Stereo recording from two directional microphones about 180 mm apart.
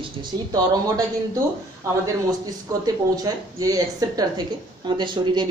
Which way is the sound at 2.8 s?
20° right (ahead or behind).